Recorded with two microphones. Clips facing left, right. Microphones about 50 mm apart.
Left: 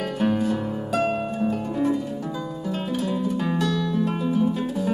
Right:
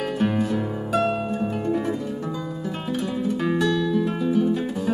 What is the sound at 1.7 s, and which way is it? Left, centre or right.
Harp, right.